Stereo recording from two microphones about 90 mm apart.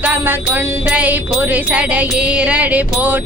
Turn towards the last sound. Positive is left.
turn(degrees=-20)  # may be behind; listen again after turning